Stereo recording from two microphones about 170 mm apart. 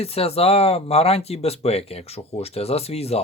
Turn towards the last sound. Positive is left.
turn(degrees=35)  # may be behind; listen again after turning